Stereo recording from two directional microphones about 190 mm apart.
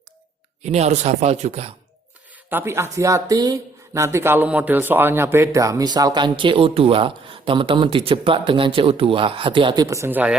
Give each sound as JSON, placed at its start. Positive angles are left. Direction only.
{"t": 0.6, "sound": "speech", "side_deg": -35}
{"t": 2.5, "sound": "speech", "side_deg": -10}